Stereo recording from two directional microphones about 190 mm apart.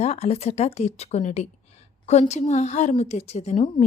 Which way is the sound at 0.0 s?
35° left (ahead or behind).